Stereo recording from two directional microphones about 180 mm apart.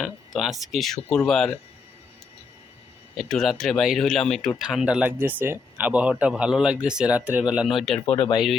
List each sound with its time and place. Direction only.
0.0 s speech: centre (ahead or behind)
3.2 s speech: centre (ahead or behind)
8.1 s speech: 30° left (ahead or behind)